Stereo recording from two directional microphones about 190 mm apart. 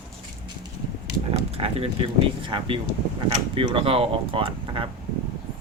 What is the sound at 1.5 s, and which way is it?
Speech, 30° right (ahead or behind).